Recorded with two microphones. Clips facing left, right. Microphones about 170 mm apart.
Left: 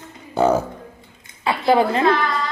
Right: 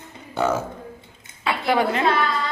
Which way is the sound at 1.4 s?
30° left (ahead or behind).